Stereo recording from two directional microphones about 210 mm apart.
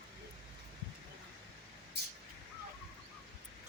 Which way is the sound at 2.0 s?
50° right (ahead or behind).